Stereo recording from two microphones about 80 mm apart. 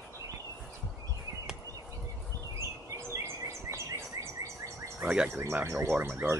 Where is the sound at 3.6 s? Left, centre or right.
Right.